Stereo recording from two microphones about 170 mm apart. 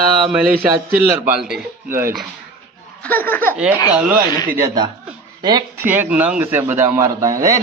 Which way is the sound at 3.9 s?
10° right (ahead or behind).